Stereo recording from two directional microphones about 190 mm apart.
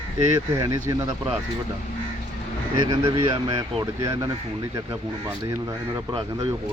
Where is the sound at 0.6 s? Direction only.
15° right (ahead or behind).